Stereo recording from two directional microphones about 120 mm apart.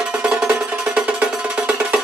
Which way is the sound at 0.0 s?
5° right (ahead or behind).